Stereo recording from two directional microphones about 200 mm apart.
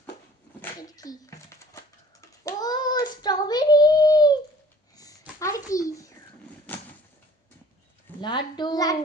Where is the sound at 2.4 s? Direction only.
20° left (ahead or behind).